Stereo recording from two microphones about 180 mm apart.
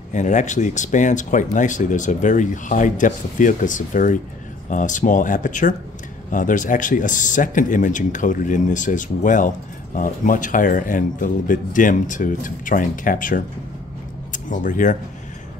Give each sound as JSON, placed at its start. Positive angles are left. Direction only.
{"t": 0.1, "sound": "speech", "side_deg": 40}